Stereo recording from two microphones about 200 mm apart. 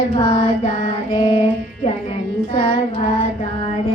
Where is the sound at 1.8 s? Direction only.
30° left (ahead or behind).